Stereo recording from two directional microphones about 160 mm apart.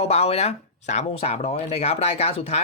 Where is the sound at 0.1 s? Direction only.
40° left (ahead or behind).